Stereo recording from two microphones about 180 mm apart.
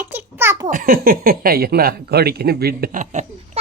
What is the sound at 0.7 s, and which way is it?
Speech, 50° right (ahead or behind).